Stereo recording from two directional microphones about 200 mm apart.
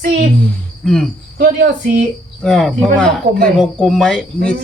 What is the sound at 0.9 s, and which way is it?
Speech, centre (ahead or behind).